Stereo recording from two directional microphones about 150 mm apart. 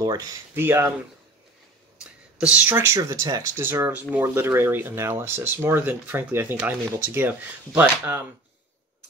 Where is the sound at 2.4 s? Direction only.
10° right (ahead or behind).